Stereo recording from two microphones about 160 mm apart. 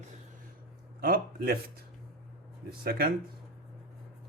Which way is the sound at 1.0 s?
65° right (ahead or behind).